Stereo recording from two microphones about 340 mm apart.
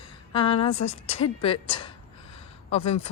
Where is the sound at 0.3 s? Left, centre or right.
Centre.